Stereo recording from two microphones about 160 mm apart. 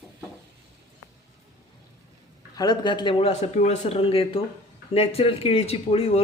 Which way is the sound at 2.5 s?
25° left (ahead or behind).